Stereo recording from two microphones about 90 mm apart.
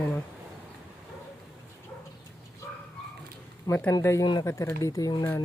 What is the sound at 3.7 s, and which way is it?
Speech, 45° left (ahead or behind).